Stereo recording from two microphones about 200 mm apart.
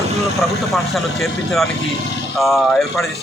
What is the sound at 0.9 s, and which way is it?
A man's voice, centre (ahead or behind).